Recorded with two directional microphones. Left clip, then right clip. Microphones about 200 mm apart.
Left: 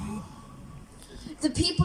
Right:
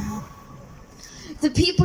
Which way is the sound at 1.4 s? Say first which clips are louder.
Right 6 dB; 20° right (ahead or behind).